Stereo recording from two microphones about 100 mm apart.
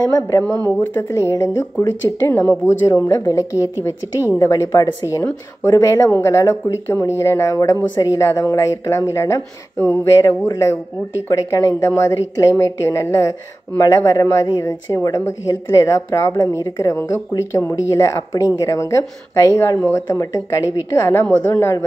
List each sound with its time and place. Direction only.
0.7 s a woman's voice: 25° left (ahead or behind)